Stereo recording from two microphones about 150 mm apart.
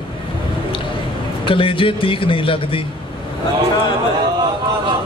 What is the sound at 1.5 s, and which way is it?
Speech, 35° left (ahead or behind).